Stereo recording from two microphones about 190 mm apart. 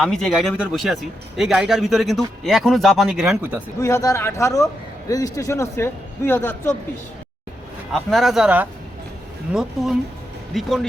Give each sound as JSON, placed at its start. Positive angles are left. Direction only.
{"t": 0.0, "sound": "speech", "side_deg": 0}
{"t": 3.8, "sound": "a man's voice", "side_deg": 15}
{"t": 7.9, "sound": "speech", "side_deg": 0}